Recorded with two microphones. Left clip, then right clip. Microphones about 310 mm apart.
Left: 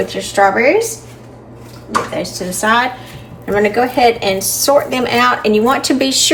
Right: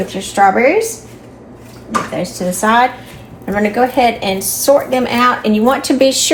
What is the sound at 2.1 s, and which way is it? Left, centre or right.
A woman's voice, centre.